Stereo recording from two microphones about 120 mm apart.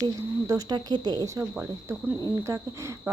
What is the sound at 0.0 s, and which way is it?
Speech, 30° right (ahead or behind).